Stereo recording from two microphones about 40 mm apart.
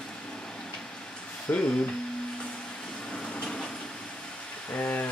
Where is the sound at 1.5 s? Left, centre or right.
Left.